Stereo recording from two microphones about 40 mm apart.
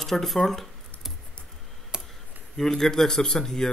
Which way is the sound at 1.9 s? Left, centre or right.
Right.